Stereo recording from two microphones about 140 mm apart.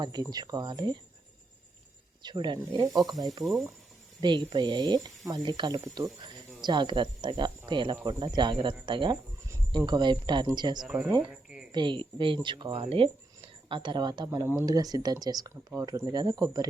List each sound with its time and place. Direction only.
0.0 s speech: 30° right (ahead or behind)
2.2 s speech: 30° right (ahead or behind)
3.4 s speech: centre (ahead or behind)
4.2 s speech: 35° right (ahead or behind)
10.8 s speech: 5° right (ahead or behind)
11.2 s a sound: 5° right (ahead or behind)
11.7 s speech: 35° right (ahead or behind)